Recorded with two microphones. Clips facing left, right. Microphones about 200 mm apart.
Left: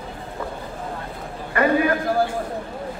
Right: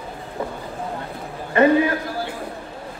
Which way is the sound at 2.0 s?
50° left (ahead or behind).